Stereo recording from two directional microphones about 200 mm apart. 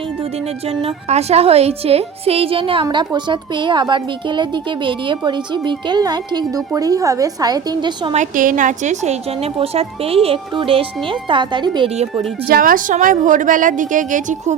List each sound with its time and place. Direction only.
0.8 s a woman's voice: 30° right (ahead or behind)
8.1 s a woman's voice: 40° right (ahead or behind)
12.5 s a woman's voice: 45° right (ahead or behind)